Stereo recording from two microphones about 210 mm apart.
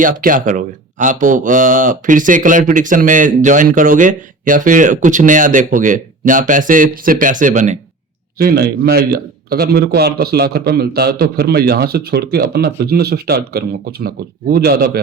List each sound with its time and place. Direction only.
0.0 s speech: 40° right (ahead or behind)
8.4 s a man's voice: 50° right (ahead or behind)